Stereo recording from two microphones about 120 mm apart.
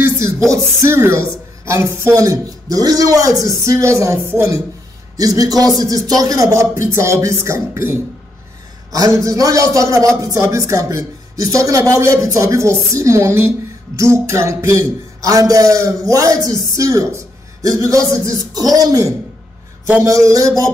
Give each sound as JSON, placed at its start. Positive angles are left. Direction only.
{"t": 0.5, "sound": "a man's voice", "side_deg": -20}